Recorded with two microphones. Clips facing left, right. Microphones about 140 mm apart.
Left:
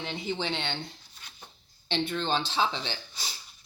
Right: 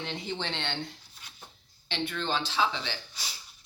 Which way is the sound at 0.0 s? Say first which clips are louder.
Left 2 dB; 5° left (ahead or behind).